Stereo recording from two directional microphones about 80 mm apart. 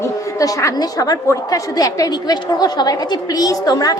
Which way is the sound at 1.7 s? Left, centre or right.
Left.